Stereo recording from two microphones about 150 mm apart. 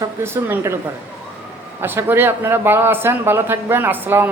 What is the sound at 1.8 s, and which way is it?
A woman's voice, 15° right (ahead or behind).